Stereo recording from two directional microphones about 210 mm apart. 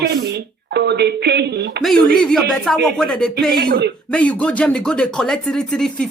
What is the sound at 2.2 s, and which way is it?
Speech, centre (ahead or behind).